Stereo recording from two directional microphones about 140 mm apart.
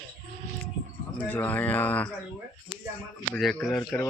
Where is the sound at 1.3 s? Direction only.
10° left (ahead or behind).